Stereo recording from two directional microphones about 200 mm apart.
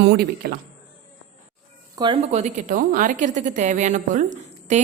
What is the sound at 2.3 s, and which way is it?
A woman's voice, 35° right (ahead or behind).